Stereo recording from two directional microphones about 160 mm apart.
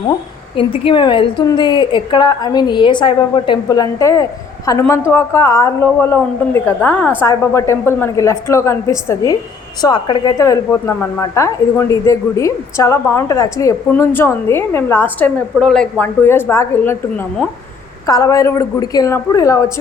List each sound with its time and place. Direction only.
0.5 s a woman's voice: 35° left (ahead or behind); by 19.6 s 20° left (ahead or behind)